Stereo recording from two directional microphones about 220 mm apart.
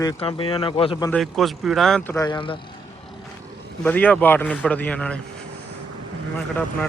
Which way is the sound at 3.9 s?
10° left (ahead or behind).